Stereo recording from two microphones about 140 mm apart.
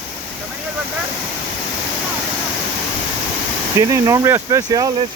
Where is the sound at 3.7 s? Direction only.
20° right (ahead or behind).